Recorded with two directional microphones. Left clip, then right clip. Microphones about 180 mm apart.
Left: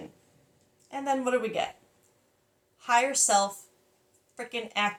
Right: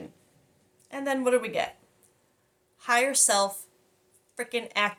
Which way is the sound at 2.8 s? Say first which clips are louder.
Even; 45° right (ahead or behind).